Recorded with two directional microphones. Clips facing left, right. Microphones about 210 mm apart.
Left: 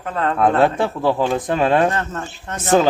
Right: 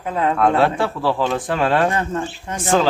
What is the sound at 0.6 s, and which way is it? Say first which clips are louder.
Speech: left 1 dB; 20° left (ahead or behind).